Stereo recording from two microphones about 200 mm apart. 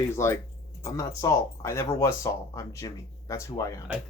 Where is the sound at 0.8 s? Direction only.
15° left (ahead or behind).